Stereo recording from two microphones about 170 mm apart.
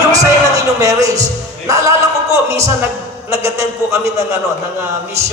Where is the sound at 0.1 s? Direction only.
20° right (ahead or behind).